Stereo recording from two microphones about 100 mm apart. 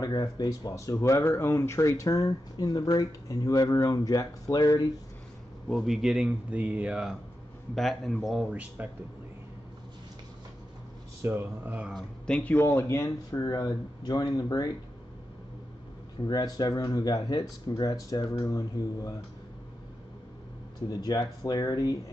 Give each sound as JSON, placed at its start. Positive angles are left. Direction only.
{"t": 0.0, "sound": "speech", "side_deg": 40}
{"t": 5.7, "sound": "a man's voice", "side_deg": 0}
{"t": 7.7, "sound": "speech", "side_deg": 5}
{"t": 8.5, "sound": "a man's voice", "side_deg": -15}
{"t": 11.2, "sound": "speech", "side_deg": -20}
{"t": 12.3, "sound": "speech", "side_deg": 10}
{"t": 12.5, "sound": "speech", "side_deg": 25}
{"t": 13.4, "sound": "speech", "side_deg": 45}
{"t": 16.3, "sound": "speech", "side_deg": 45}
{"t": 20.9, "sound": "speech", "side_deg": 40}